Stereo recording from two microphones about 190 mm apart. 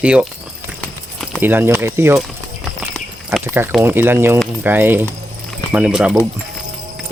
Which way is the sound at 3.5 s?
5° right (ahead or behind).